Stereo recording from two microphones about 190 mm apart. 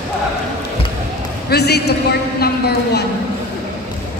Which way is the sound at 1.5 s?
60° left (ahead or behind).